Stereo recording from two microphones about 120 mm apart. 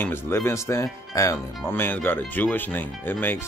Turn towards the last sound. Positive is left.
turn(degrees=15)  # may be behind; listen again after turning